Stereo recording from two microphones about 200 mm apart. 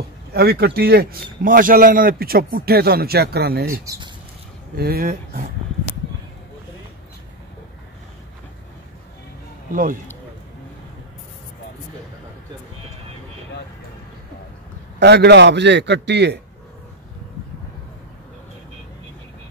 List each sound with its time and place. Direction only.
0.3 s a man's voice: 50° right (ahead or behind)
15.0 s a man's voice: 55° right (ahead or behind)